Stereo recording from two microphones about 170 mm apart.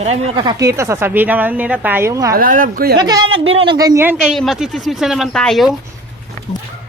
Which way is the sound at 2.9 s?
25° right (ahead or behind).